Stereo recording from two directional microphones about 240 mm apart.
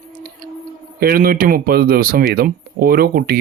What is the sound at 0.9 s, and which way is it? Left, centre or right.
Speech, right.